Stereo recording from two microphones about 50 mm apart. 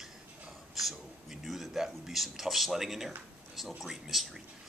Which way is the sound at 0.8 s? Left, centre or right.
Centre.